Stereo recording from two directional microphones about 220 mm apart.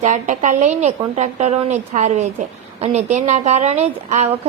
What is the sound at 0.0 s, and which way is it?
A woman's voice, 35° right (ahead or behind).